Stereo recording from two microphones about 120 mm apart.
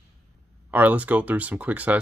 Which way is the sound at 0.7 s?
15° right (ahead or behind).